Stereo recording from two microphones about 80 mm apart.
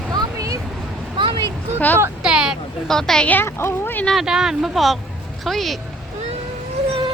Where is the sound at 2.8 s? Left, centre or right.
Centre.